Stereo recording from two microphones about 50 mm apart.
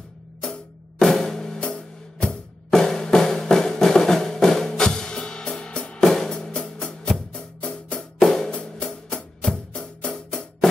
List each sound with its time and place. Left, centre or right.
0.4 s music: centre
2.7 s music: centre
8.2 s music: centre; by 10.1 s left
10.1 s music: centre